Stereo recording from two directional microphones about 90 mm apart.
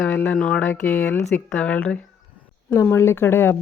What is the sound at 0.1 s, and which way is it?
Speech, 20° left (ahead or behind).